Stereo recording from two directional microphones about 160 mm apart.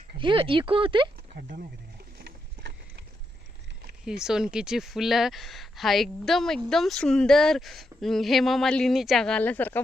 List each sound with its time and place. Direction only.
0.2 s speech: 30° right (ahead or behind)
1.4 s speech: 60° right (ahead or behind)
2.1 s a sound: 80° right
4.0 s speech: 5° right (ahead or behind)